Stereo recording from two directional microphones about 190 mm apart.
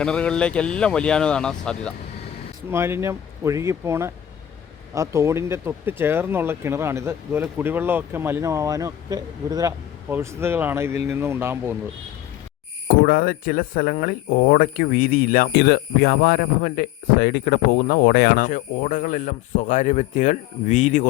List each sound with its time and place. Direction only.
0.0 s speech: 5° left (ahead or behind)
2.6 s speech: 10° right (ahead or behind)
12.9 s speech: 50° left (ahead or behind)